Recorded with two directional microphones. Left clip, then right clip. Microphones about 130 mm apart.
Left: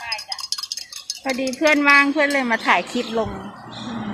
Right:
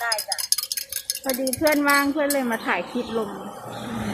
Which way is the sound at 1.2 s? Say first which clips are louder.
Left 3 dB; 45° left (ahead or behind).